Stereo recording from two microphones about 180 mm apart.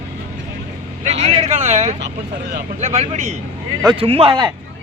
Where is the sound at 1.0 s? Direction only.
40° right (ahead or behind).